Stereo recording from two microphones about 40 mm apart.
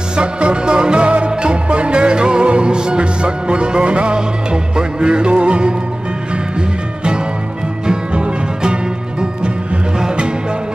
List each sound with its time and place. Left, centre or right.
0.1 s music: right
7.8 s music: right
9.9 s music: right